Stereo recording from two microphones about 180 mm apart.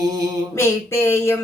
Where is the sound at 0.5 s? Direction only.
15° left (ahead or behind).